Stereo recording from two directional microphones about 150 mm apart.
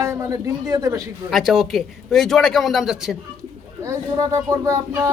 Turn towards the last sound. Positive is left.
turn(degrees=-20)  # may be behind; listen again after turning